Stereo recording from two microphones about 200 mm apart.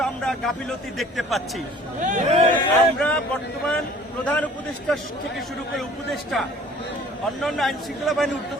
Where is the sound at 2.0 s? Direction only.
40° right (ahead or behind).